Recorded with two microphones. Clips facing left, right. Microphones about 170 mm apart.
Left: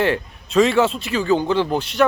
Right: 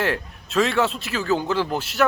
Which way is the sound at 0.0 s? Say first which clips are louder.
Left 5 dB; centre (ahead or behind).